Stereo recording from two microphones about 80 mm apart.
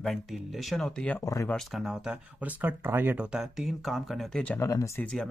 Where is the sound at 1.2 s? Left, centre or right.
Left.